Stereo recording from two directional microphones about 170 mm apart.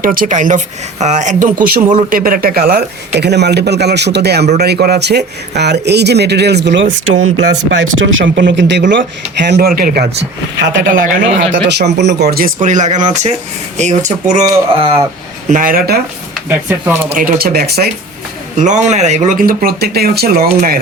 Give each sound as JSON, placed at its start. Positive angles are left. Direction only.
{"t": 0.0, "sound": "speech", "side_deg": -55}
{"t": 3.2, "sound": "speech", "side_deg": -80}
{"t": 10.6, "sound": "speech", "side_deg": -90}
{"t": 15.4, "sound": "speech", "side_deg": -55}
{"t": 16.5, "sound": "speech", "side_deg": -10}
{"t": 17.2, "sound": "speech", "side_deg": -60}
{"t": 18.5, "sound": "speech", "side_deg": -45}